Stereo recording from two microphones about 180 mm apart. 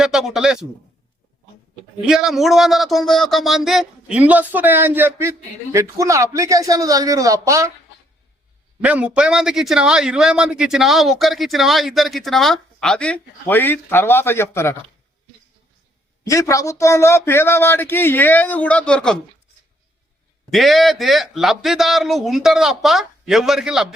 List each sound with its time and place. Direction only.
0.0 s speech: 5° right (ahead or behind)
2.0 s a man's voice: centre (ahead or behind)
8.8 s a man's voice: 5° right (ahead or behind); by 14.8 s 15° left (ahead or behind)
16.2 s a man's voice: 15° left (ahead or behind)
20.5 s a man's voice: centre (ahead or behind)